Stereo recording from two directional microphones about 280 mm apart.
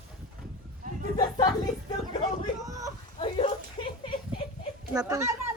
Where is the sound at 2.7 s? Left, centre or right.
Centre.